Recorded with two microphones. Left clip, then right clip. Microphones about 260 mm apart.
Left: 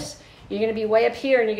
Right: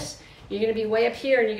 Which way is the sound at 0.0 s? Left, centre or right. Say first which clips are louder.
Left 1 dB; centre.